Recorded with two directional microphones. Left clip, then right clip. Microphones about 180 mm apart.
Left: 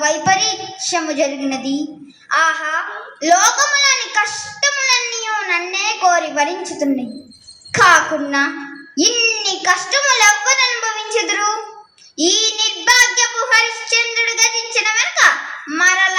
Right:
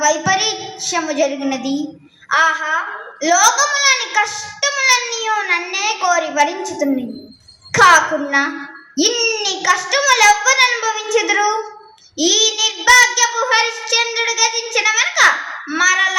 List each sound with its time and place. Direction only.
0.0 s child singing: 35° right (ahead or behind)
2.3 s a sound: 35° right (ahead or behind)
7.7 s child singing: 35° right (ahead or behind)